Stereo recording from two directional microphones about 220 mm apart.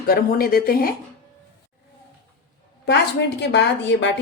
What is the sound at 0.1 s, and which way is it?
Speech, 40° left (ahead or behind).